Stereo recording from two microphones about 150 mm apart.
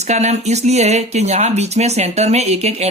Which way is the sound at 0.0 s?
50° right (ahead or behind).